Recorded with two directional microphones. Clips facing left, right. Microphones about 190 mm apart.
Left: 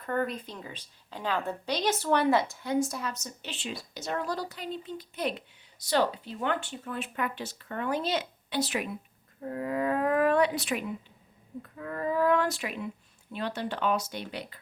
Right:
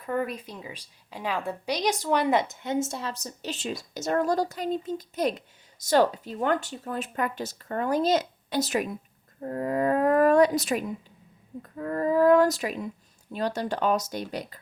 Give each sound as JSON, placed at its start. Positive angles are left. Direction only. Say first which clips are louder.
{"t": 0.0, "sound": "a woman's voice", "louder": "right 1 dB", "side_deg": -10}